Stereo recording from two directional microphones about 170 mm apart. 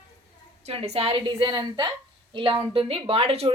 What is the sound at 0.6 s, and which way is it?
Speech, 35° right (ahead or behind).